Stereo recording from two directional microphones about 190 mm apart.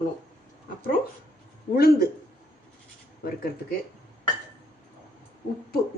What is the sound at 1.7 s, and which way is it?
Speech, 55° left (ahead or behind).